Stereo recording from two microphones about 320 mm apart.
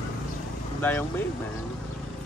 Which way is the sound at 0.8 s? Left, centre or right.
Centre.